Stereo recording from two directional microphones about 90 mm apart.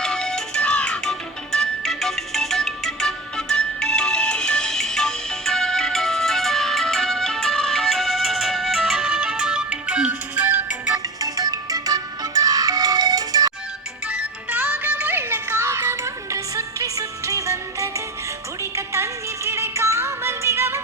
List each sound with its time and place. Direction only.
0.0 s music: 5° left (ahead or behind); by 11.0 s 15° right (ahead or behind)
11.2 s music: 40° right (ahead or behind)
14.1 s music: 15° right (ahead or behind)